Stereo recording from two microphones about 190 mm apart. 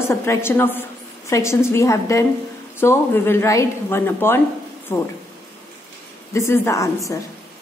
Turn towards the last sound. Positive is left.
turn(degrees=15)  # may be behind; listen again after turning